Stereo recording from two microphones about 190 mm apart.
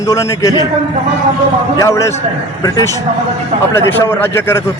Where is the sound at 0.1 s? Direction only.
15° left (ahead or behind).